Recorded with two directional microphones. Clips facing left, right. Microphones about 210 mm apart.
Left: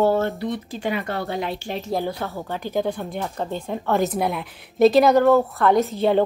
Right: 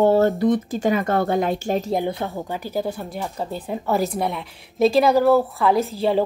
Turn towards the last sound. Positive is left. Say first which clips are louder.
# left 1 dB
turn(degrees=0)  # may be behind; listen again after turning